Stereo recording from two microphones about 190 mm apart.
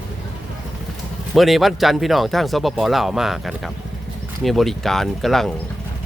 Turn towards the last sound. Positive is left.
turn(degrees=0)  # may be behind; listen again after turning